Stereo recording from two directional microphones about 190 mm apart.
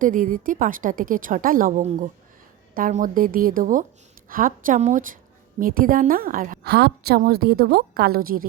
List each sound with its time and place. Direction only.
0.0 s a woman's voice: 45° right (ahead or behind)